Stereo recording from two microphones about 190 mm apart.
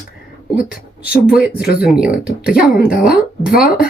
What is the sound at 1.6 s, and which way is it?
Speech, 55° left (ahead or behind).